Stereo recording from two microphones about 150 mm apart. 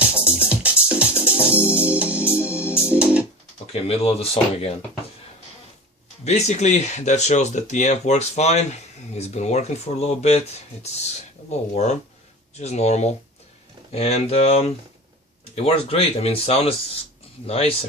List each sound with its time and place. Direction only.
0.0 s music: 10° right (ahead or behind)
3.7 s speech: 45° left (ahead or behind)
6.2 s speech: 50° left (ahead or behind)
11.7 s speech: 50° left (ahead or behind)